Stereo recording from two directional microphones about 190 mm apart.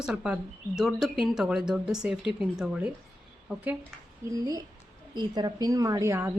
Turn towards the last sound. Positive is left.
turn(degrees=-15)  # may be behind; listen again after turning